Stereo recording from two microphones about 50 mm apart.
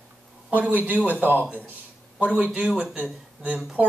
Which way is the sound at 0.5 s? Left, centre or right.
Right.